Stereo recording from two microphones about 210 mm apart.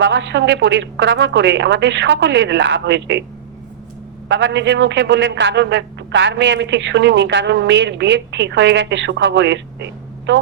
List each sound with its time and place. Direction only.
0.0 s a man's voice: 60° right (ahead or behind)
4.3 s a man's voice: 60° right (ahead or behind)